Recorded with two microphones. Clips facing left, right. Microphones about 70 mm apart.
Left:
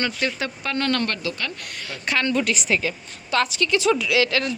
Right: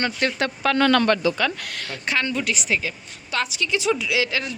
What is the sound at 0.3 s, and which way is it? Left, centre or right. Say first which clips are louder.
Speech: right 5 dB; right.